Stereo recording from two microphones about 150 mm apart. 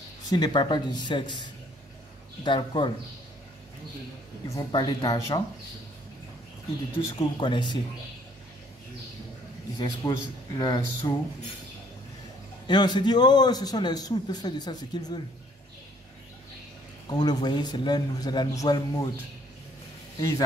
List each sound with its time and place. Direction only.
0.3 s speech: 30° left (ahead or behind)
2.4 s speech: 30° left (ahead or behind)
4.5 s a man's voice: 25° left (ahead or behind)
7.2 s speech: 30° left (ahead or behind)
9.8 s a man's voice: 25° left (ahead or behind)
12.6 s a man's voice: 30° left (ahead or behind)
17.1 s a man's voice: 30° left (ahead or behind)
20.2 s a man's voice: 20° left (ahead or behind)